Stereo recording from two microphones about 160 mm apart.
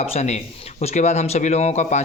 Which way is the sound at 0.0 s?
40° left (ahead or behind).